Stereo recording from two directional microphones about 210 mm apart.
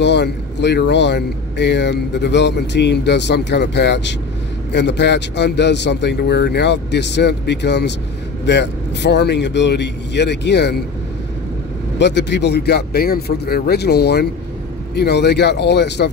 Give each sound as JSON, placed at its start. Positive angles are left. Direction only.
{"t": 0.0, "sound": "speech", "side_deg": 55}
{"t": 12.0, "sound": "a man's voice", "side_deg": 55}